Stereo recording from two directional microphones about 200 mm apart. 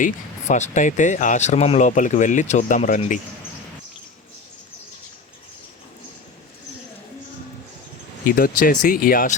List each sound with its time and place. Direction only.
0.0 s speech: 35° left (ahead or behind)
8.2 s speech: 45° left (ahead or behind)